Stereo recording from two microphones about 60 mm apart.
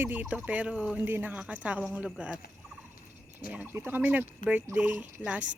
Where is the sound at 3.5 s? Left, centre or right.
Right.